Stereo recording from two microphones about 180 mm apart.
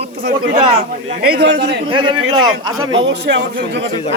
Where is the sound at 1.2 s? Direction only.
70° right (ahead or behind).